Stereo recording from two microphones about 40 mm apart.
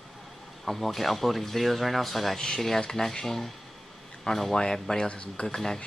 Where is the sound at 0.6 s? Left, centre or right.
Centre.